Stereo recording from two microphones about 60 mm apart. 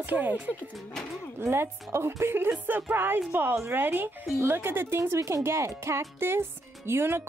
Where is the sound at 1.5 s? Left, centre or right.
Right.